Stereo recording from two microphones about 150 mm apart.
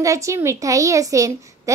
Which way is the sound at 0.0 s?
20° right (ahead or behind).